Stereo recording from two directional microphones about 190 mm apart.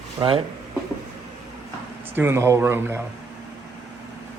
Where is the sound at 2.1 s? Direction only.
10° right (ahead or behind).